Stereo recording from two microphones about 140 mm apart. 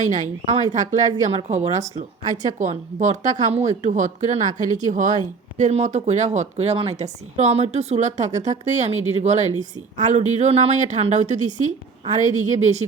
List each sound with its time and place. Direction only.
0.1 s a woman's voice: 65° right (ahead or behind)
1.3 s a woman's voice: 50° right (ahead or behind)